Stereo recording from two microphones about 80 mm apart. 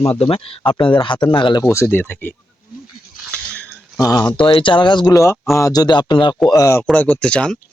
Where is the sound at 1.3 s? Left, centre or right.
Left.